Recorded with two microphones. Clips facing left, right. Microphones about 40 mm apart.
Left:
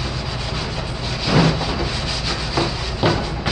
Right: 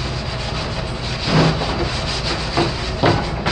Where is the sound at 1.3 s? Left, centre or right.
Left.